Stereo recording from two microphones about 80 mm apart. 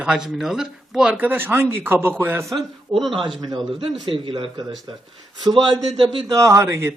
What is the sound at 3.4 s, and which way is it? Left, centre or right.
A man's voice, right.